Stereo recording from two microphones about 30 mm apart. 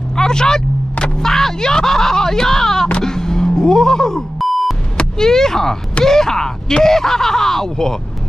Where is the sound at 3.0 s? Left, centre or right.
Centre.